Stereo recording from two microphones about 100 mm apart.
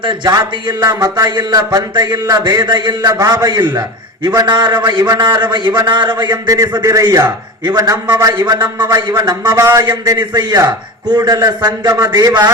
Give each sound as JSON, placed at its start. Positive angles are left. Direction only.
{"t": 0.3, "sound": "a man's voice", "side_deg": -40}
{"t": 9.6, "sound": "speech", "side_deg": -30}
{"t": 9.9, "sound": "speech", "side_deg": -45}